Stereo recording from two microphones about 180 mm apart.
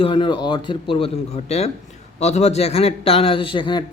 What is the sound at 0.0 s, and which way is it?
A man's voice, 30° left (ahead or behind).